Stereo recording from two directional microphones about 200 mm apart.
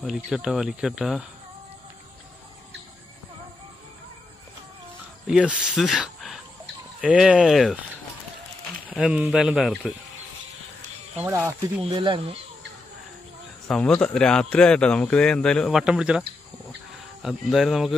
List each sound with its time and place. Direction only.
0.0 s speech: 5° right (ahead or behind)
5.2 s speech: 5° right (ahead or behind)
8.9 s speech: 5° right (ahead or behind)
11.1 s speech: 10° right (ahead or behind)
11.8 s speech: 25° right (ahead or behind)
13.7 s speech: 5° left (ahead or behind)